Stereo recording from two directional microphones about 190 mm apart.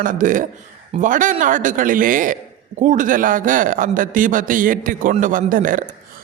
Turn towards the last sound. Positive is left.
turn(degrees=-45)  # may be behind; listen again after turning